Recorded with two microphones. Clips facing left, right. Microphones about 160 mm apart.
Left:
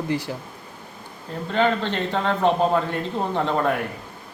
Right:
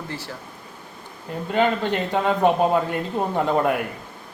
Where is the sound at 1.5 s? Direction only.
10° right (ahead or behind).